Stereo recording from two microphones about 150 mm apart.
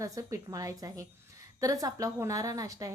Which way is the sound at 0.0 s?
20° right (ahead or behind).